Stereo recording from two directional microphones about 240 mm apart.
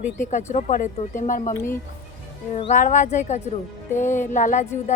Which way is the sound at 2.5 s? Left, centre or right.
Left.